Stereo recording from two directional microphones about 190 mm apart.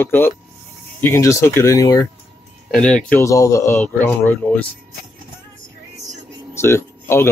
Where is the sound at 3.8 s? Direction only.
5° left (ahead or behind).